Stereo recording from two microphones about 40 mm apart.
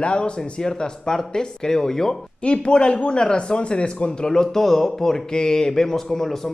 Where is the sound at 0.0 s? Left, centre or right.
Left; by 2.1 s centre.